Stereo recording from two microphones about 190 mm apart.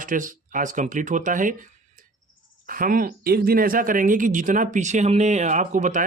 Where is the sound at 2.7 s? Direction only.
50° right (ahead or behind).